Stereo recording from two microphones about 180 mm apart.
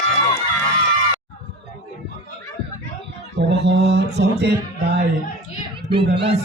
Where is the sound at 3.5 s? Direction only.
70° right (ahead or behind).